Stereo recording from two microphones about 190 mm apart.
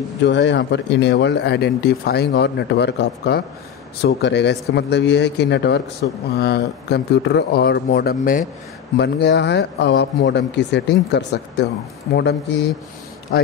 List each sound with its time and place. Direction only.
0.2 s speech: 65° left (ahead or behind)
6.0 s speech: 75° left (ahead or behind)
6.3 s speech: 55° left (ahead or behind)
8.9 s speech: 60° left (ahead or behind)